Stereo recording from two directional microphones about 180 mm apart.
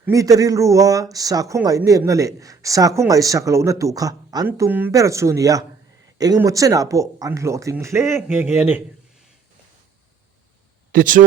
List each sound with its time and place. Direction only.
0.0 s speech: 20° right (ahead or behind)
10.9 s speech: 50° right (ahead or behind)